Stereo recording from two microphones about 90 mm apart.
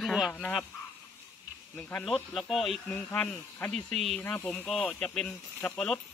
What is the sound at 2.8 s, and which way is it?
Speech, 15° left (ahead or behind).